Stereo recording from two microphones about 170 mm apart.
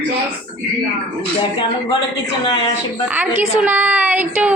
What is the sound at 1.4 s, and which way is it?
Speech, 30° left (ahead or behind).